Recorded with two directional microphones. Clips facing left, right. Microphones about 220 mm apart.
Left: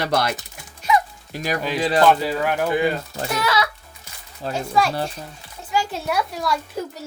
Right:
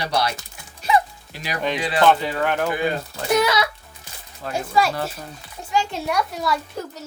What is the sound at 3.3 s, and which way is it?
Child singing, 20° right (ahead or behind).